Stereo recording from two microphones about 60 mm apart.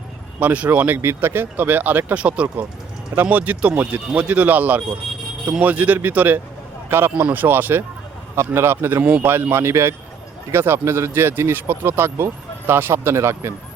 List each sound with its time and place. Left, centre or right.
0.3 s speech: right
0.9 s speech: right
2.2 s speech: centre
7.1 s speech: right
7.3 s speech: right